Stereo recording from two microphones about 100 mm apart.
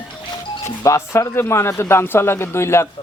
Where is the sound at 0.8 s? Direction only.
30° left (ahead or behind).